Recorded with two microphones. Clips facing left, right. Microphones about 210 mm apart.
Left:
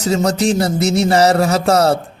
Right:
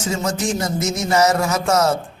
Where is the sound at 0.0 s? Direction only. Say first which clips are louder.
Left 7 dB; 35° left (ahead or behind).